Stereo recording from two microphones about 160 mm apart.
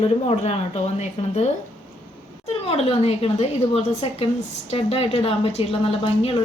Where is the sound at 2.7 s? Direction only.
40° left (ahead or behind).